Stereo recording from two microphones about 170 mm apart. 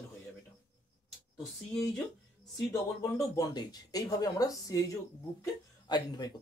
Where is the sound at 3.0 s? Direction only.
20° left (ahead or behind).